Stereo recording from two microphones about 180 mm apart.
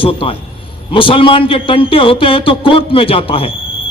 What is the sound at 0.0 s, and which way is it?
A man's voice, 30° left (ahead or behind).